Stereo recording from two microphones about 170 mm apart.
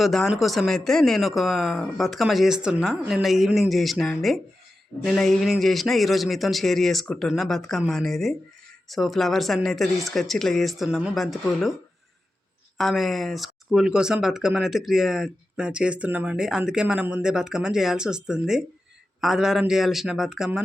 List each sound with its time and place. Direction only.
0.0 s speech: centre (ahead or behind)
12.7 s speech: centre (ahead or behind)